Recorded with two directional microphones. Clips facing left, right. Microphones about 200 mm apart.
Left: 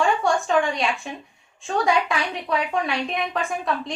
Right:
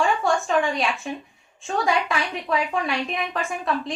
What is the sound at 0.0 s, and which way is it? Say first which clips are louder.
A woman's voice: left 1 dB; centre (ahead or behind).